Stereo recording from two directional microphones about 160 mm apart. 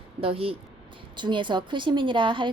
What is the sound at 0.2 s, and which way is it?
A woman's voice, 35° right (ahead or behind).